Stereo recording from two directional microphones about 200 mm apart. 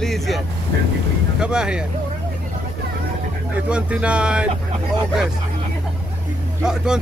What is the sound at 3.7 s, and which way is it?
Speech, 5° right (ahead or behind).